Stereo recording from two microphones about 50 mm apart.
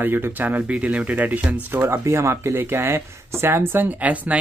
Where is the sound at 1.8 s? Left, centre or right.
Right.